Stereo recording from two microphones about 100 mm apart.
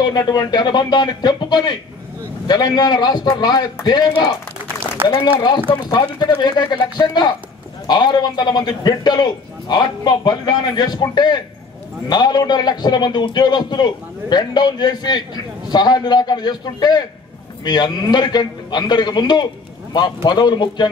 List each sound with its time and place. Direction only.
0.0 s a man's voice: 40° left (ahead or behind)
5.0 s speech: 25° right (ahead or behind)
5.7 s a man's voice: 45° left (ahead or behind)